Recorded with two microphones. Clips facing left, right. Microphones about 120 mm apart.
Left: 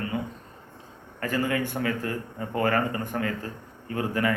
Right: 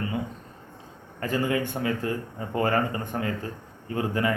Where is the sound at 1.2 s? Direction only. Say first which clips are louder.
Right 1 dB; 25° right (ahead or behind).